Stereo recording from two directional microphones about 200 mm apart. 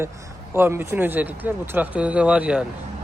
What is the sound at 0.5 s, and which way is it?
Speech, 10° right (ahead or behind).